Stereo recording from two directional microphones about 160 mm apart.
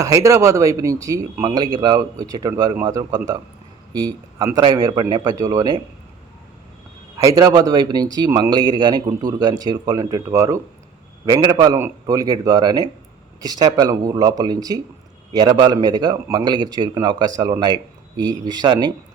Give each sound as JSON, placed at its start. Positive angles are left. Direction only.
{"t": 0.0, "sound": "a man's voice", "side_deg": -20}
{"t": 7.2, "sound": "speech", "side_deg": -20}